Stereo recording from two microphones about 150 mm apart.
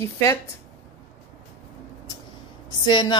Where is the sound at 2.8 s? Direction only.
30° left (ahead or behind).